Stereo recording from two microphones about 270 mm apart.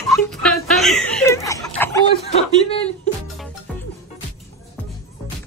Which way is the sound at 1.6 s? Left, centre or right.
Centre.